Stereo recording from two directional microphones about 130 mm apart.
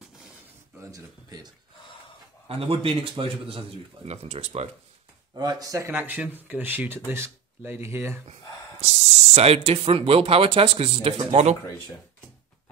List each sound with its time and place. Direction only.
0.7 s speech: 30° right (ahead or behind)
2.4 s speech: 45° right (ahead or behind)
5.3 s speech: 30° right (ahead or behind)
8.8 s speech: 55° right (ahead or behind)